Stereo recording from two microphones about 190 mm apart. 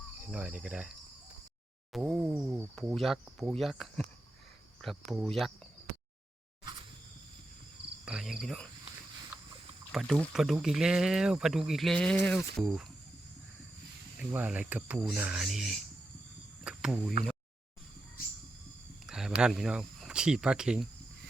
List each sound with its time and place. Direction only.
0.3 s speech: 5° right (ahead or behind)
1.9 s a sound: 5° right (ahead or behind)
2.7 s speech: centre (ahead or behind)
8.0 s cricket: 5° right (ahead or behind)
9.9 s speech: centre (ahead or behind)
14.2 s speech: 10° right (ahead or behind)
19.0 s a sound: centre (ahead or behind)
19.4 s speech: 5° right (ahead or behind)